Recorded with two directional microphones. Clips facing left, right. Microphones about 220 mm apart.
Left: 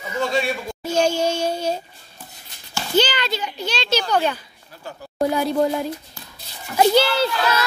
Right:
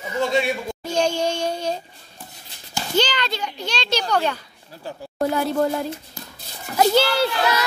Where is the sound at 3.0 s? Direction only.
5° left (ahead or behind).